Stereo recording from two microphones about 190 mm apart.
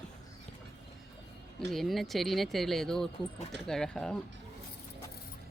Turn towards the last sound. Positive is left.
turn(degrees=5)  # may be behind; listen again after turning